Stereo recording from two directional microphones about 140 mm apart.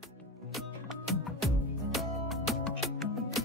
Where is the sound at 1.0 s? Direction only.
Centre (ahead or behind).